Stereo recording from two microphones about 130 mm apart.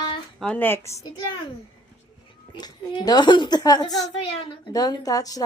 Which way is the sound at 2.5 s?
35° left (ahead or behind).